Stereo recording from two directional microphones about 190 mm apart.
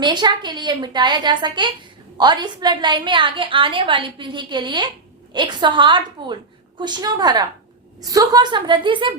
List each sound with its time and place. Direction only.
0.0 s a woman's voice: 25° right (ahead or behind)